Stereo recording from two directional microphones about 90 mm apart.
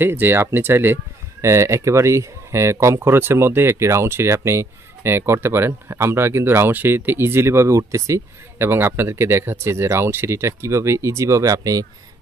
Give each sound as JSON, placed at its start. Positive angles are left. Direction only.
{"t": 0.0, "sound": "speech", "side_deg": -25}